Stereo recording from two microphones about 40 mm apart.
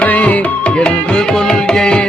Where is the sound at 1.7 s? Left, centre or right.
Left.